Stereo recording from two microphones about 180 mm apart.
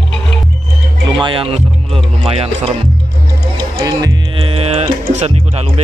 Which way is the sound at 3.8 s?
20° right (ahead or behind).